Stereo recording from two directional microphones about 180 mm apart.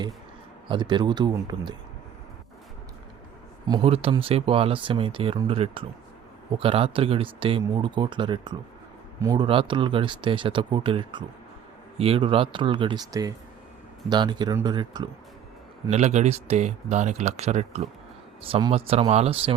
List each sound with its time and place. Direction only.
0.7 s speech: 25° right (ahead or behind)
3.7 s speech: 30° right (ahead or behind)
15.9 s speech: 40° right (ahead or behind)